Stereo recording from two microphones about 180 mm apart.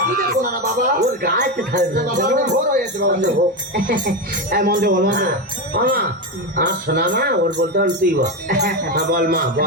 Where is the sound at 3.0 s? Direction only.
65° right (ahead or behind).